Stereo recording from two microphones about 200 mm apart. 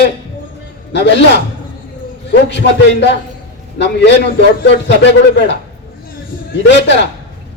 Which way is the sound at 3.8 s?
60° left (ahead or behind).